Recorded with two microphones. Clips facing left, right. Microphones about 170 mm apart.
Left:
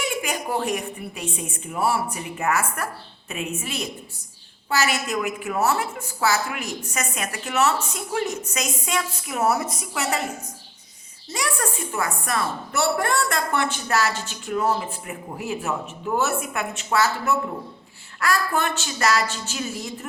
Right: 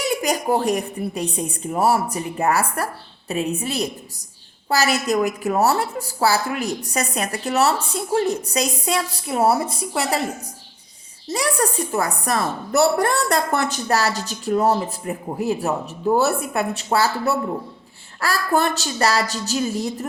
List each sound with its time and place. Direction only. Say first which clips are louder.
0.0 s a woman's voice: right 5 dB; 40° right (ahead or behind)
11.3 s a woman's voice: right 6 dB; 35° right (ahead or behind)